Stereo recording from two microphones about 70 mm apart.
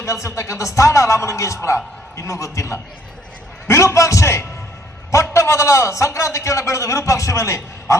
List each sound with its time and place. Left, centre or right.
0.0 s speech: left